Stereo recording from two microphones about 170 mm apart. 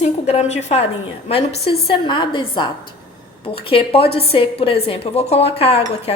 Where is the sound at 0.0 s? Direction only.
40° left (ahead or behind).